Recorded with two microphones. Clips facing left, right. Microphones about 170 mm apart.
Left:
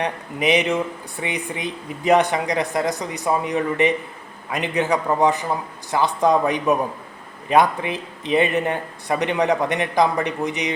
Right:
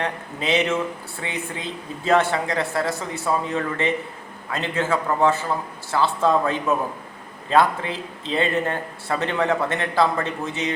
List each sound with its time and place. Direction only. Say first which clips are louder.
0.0 s speech: left 4 dB; 15° left (ahead or behind)